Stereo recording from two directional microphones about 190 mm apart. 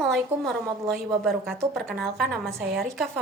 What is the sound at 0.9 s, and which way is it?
Music, centre (ahead or behind).